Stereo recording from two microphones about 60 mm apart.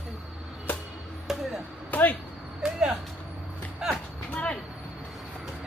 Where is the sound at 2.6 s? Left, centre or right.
Centre.